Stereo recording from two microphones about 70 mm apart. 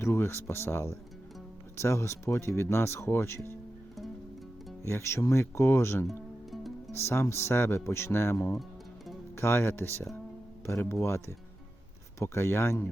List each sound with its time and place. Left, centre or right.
0.0 s speech: left
4.8 s speech: left
6.5 s music: centre
6.9 s speech: left